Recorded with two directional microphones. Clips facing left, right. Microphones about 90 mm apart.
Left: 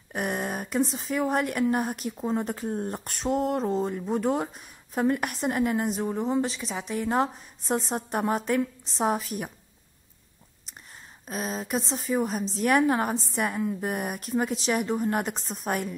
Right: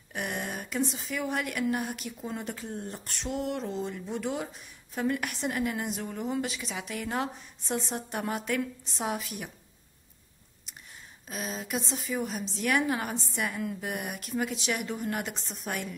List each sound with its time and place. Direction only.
0.1 s a woman's voice: 40° left (ahead or behind)
11.2 s a woman's voice: 40° left (ahead or behind)